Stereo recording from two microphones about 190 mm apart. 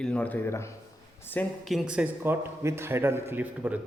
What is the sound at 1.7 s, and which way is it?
A man's voice, 5° right (ahead or behind).